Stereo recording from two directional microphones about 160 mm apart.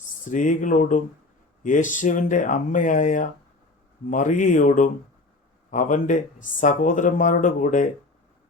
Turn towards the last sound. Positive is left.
turn(degrees=50)  # may be behind; listen again after turning